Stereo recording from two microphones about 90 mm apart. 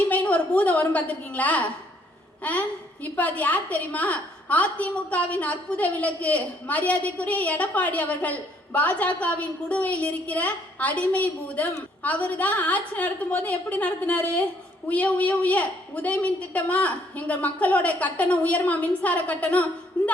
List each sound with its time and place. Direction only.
0.1 s a woman's voice: 15° left (ahead or behind)